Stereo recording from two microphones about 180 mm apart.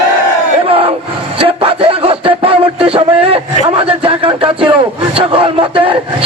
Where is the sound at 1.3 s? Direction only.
30° right (ahead or behind).